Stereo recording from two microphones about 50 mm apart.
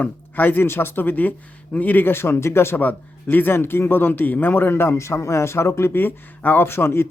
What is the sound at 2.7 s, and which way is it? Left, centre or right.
Speech, left.